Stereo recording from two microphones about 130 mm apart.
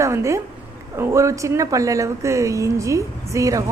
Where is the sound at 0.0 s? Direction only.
20° right (ahead or behind).